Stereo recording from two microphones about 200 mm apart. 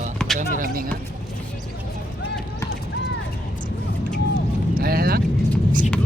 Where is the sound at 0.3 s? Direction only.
40° right (ahead or behind).